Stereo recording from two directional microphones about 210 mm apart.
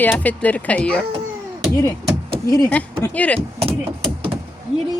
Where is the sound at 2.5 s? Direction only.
10° left (ahead or behind).